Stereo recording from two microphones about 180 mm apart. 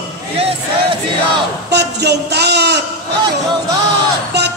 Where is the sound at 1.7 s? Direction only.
65° right (ahead or behind).